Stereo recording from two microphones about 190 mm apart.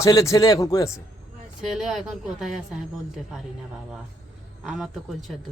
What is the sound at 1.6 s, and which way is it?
Speech, 5° right (ahead or behind).